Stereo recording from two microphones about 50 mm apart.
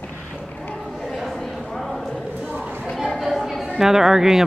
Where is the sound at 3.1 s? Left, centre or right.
Centre.